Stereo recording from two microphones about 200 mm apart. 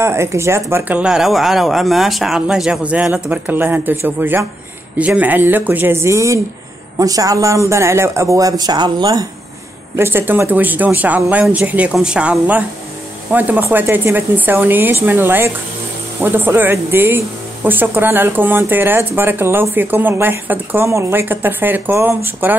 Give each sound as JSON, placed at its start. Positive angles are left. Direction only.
{"t": 0.0, "sound": "speech", "side_deg": -15}